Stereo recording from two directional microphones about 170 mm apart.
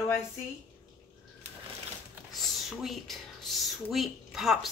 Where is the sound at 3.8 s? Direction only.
Centre (ahead or behind).